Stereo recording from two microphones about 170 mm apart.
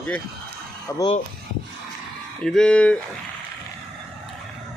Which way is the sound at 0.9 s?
20° left (ahead or behind).